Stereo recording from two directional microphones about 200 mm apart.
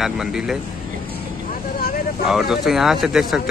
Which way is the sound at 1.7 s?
50° left (ahead or behind).